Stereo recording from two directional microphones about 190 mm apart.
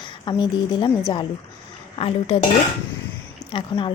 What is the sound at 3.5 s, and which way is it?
Speech, 25° left (ahead or behind).